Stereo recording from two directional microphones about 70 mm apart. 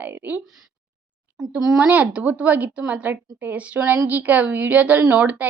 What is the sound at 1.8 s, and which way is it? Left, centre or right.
A woman's voice, right.